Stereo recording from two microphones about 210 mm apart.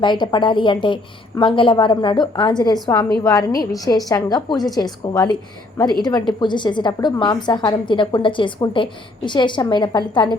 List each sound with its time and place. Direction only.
0.0 s a woman's voice: 20° left (ahead or behind)